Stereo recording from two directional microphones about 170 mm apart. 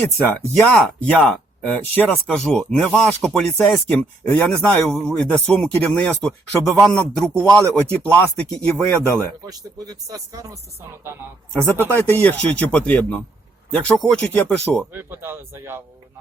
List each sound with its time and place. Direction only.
0.0 s speech: 5° left (ahead or behind)
9.1 s speech: 20° right (ahead or behind)
11.5 s speech: 10° left (ahead or behind)
14.9 s speech: 15° right (ahead or behind)